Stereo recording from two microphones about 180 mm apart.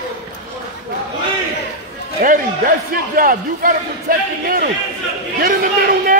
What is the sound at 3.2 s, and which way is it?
A man's voice, 50° right (ahead or behind).